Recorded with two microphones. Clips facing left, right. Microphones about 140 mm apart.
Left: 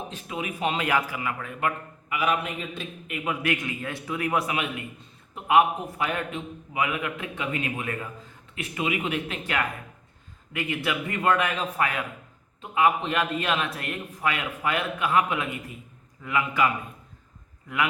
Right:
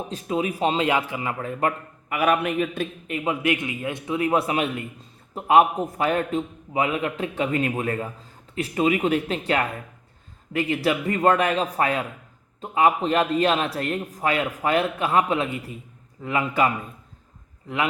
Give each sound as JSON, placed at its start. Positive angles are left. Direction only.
{"t": 0.1, "sound": "a man's voice", "side_deg": -35}
{"t": 2.0, "sound": "a man's voice", "side_deg": -50}
{"t": 3.1, "sound": "a man's voice", "side_deg": -25}
{"t": 17.7, "sound": "a man's voice", "side_deg": -35}